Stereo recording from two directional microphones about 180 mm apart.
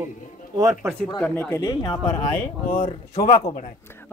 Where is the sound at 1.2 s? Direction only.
10° left (ahead or behind).